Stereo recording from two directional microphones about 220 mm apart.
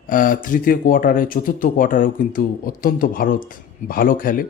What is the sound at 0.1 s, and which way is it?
Speech, 40° left (ahead or behind).